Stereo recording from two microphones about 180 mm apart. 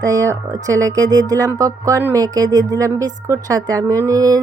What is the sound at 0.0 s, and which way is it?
Speech, 20° right (ahead or behind).